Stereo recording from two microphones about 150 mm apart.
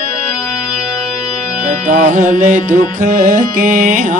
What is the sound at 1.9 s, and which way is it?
Music, 55° right (ahead or behind).